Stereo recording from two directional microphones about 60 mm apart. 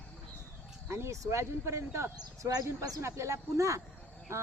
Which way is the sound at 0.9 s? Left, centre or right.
Right.